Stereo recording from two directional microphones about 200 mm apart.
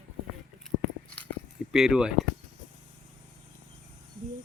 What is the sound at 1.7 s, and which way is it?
Speech, 5° right (ahead or behind).